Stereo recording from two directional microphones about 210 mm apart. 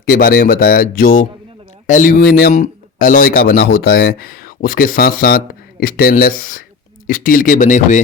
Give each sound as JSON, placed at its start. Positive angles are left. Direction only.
{"t": 0.0, "sound": "a man's voice", "side_deg": 40}